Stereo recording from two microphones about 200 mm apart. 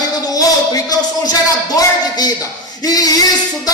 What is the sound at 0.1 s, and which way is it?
A man's voice, 20° left (ahead or behind).